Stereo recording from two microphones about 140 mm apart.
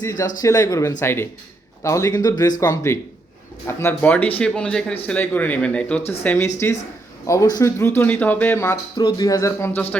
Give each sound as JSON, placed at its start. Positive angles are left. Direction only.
{"t": 0.0, "sound": "speech", "side_deg": 25}
{"t": 7.5, "sound": "speech", "side_deg": 20}
{"t": 9.0, "sound": "speech", "side_deg": 30}